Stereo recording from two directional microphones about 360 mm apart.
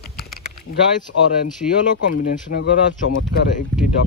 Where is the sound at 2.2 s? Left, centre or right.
Left.